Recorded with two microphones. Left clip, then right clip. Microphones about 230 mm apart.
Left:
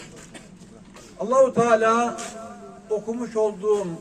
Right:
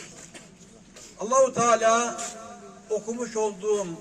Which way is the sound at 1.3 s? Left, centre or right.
Right.